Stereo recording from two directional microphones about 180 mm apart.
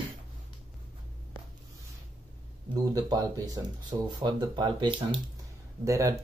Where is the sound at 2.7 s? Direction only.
20° right (ahead or behind).